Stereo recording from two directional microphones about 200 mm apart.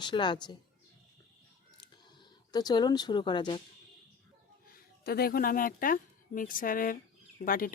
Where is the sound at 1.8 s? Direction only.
20° left (ahead or behind).